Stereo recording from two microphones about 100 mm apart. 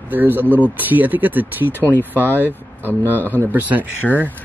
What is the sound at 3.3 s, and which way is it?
Speech, 20° right (ahead or behind).